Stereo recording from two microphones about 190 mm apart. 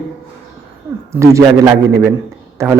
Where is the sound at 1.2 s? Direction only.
15° right (ahead or behind).